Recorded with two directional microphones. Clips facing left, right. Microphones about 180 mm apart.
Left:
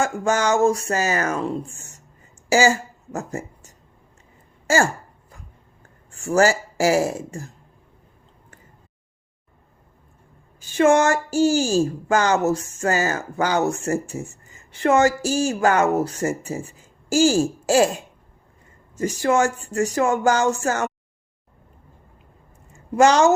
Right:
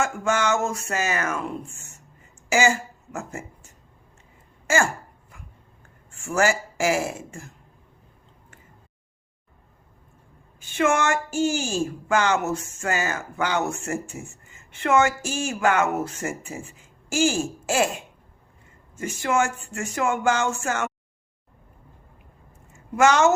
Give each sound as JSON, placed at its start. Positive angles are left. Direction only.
{"t": 0.0, "sound": "speech", "side_deg": 35}
{"t": 6.1, "sound": "speech", "side_deg": 35}
{"t": 10.6, "sound": "speech", "side_deg": 35}
{"t": 23.0, "sound": "speech", "side_deg": 35}